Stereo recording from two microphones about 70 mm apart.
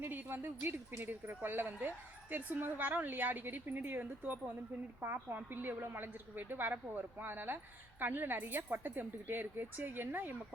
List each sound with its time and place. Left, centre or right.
0.0 s a woman's voice: right